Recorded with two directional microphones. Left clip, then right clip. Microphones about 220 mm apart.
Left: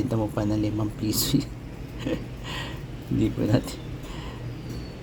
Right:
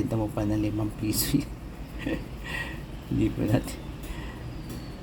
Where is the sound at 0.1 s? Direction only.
5° left (ahead or behind).